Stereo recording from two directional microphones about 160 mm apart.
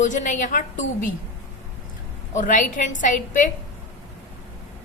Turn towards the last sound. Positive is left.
turn(degrees=55)  # may be behind; listen again after turning